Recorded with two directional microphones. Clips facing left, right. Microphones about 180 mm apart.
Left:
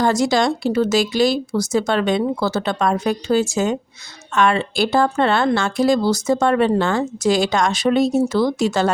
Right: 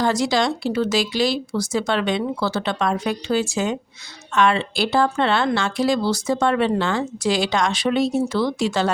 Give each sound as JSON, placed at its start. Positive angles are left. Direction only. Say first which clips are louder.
{"t": 0.0, "sound": "speech", "louder": "left 3 dB", "side_deg": 45}